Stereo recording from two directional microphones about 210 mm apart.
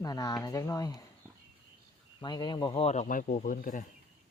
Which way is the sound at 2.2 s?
20° left (ahead or behind).